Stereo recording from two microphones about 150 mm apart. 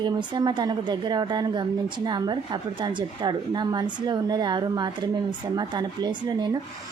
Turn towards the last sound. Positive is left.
turn(degrees=-25)  # may be behind; listen again after turning